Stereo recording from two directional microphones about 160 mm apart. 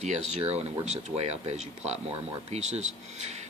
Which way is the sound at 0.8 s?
40° right (ahead or behind).